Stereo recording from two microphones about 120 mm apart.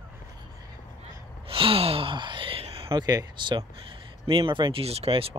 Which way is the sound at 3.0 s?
35° right (ahead or behind).